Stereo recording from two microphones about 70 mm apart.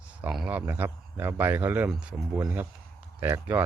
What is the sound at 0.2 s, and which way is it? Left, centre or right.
Speech, right.